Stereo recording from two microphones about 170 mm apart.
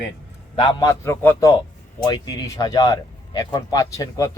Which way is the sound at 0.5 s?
25° left (ahead or behind).